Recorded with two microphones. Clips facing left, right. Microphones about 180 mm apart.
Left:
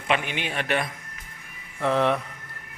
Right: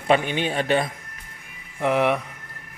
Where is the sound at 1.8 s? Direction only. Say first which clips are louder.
Right 2 dB; 15° right (ahead or behind).